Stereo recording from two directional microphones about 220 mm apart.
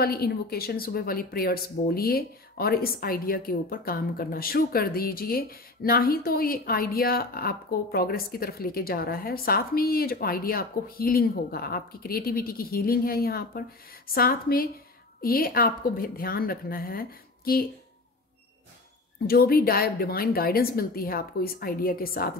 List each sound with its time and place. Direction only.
0.0 s a woman's voice: 45° left (ahead or behind)
19.2 s a woman's voice: 45° left (ahead or behind)